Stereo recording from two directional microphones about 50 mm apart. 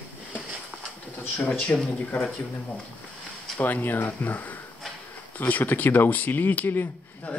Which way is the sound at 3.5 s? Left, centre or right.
Left.